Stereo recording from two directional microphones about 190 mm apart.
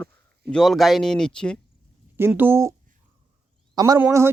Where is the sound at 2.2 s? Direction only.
10° right (ahead or behind).